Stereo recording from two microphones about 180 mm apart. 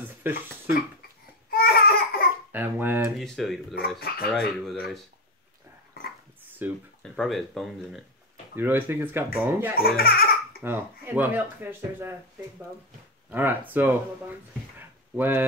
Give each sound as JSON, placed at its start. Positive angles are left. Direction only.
{"t": 0.2, "sound": "speech", "side_deg": -10}
{"t": 1.5, "sound": "baby cry", "side_deg": 55}
{"t": 2.5, "sound": "speech", "side_deg": -10}
{"t": 3.2, "sound": "speech", "side_deg": 0}
{"t": 6.6, "sound": "speech", "side_deg": -10}
{"t": 7.0, "sound": "speech", "side_deg": 0}
{"t": 8.5, "sound": "speech", "side_deg": -10}
{"t": 9.8, "sound": "speech", "side_deg": 55}
{"t": 10.6, "sound": "speech", "side_deg": -10}
{"t": 13.3, "sound": "speech", "side_deg": -10}
{"t": 14.8, "sound": "a sound", "side_deg": -10}